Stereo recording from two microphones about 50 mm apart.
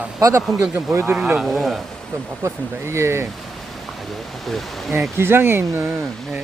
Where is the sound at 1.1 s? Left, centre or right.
Right.